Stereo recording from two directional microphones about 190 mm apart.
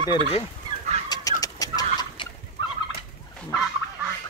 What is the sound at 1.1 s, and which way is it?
Fowl, 20° left (ahead or behind).